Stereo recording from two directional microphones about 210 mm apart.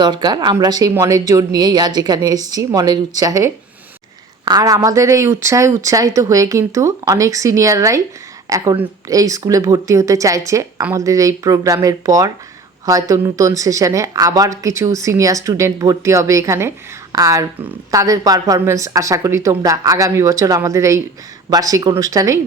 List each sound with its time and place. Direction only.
0.0 s speech: 20° right (ahead or behind)